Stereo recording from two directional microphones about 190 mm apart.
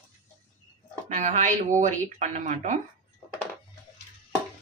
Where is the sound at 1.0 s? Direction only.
40° right (ahead or behind).